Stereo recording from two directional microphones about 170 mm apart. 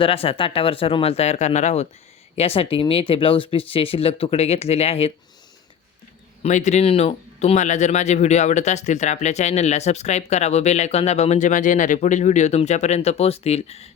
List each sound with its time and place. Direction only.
0.0 s speech: 35° left (ahead or behind)
6.4 s speech: 45° left (ahead or behind)